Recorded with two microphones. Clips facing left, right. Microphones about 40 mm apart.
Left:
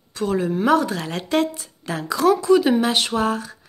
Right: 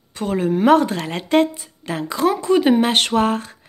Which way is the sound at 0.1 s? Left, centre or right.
Right.